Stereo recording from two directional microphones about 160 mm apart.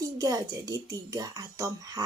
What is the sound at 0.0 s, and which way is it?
Speech, 20° right (ahead or behind).